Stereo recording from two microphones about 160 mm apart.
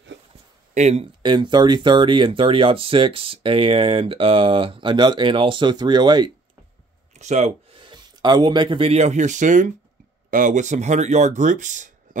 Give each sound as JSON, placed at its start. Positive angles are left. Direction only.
{"t": 0.7, "sound": "speech", "side_deg": -45}
{"t": 1.2, "sound": "speech", "side_deg": -30}
{"t": 7.2, "sound": "speech", "side_deg": -45}